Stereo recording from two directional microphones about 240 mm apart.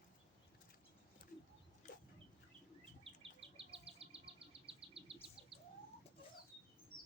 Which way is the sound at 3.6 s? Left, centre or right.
Right.